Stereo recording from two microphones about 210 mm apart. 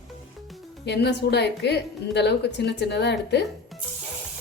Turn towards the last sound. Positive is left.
turn(degrees=55)  # may be behind; listen again after turning